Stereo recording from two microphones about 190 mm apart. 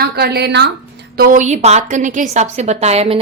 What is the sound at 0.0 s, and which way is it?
Speech, 60° right (ahead or behind).